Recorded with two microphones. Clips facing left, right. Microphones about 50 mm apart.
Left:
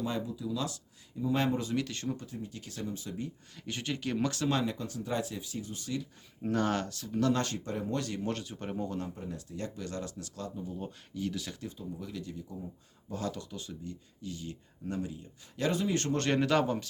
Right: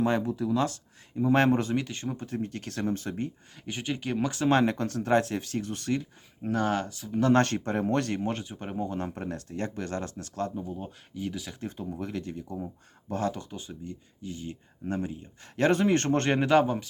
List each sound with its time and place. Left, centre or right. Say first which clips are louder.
0.0 s speech: right 8 dB; right
1.7 s speech: right 3 dB; right
2.2 s speech: right 8 dB; right
3.5 s speech: right 3 dB; centre
4.4 s speech: right 7 dB; right
6.4 s speech: right 3 dB; centre
7.3 s speech: right 9 dB; right
8.2 s speech: right 3 dB; right
9.1 s speech: right 6 dB; right
10.8 s speech: right 1 dB; centre
11.8 s speech: right 6 dB; right
13.1 s speech: right 6 dB; right
15.5 s speech: right 7 dB; right
16.2 s speech: right 2 dB; right